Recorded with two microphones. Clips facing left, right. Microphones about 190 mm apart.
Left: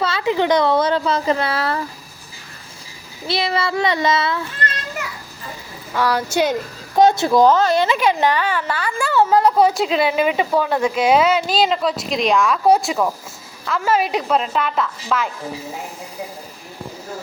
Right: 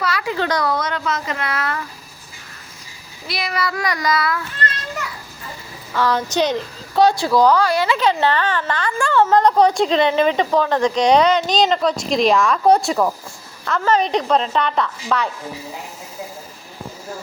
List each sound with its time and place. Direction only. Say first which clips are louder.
0.0 s a woman's voice: left 3 dB; 25° left (ahead or behind)
3.2 s speech: left 3 dB; 30° left (ahead or behind)
5.9 s speech: even; 10° left (ahead or behind)
7.0 s a woman's voice: left 1 dB; 20° left (ahead or behind); by 15.3 s 5° left (ahead or behind)